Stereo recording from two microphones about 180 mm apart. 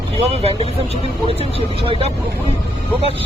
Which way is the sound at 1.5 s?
30° right (ahead or behind).